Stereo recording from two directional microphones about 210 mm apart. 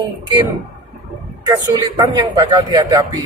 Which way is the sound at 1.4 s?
20° right (ahead or behind).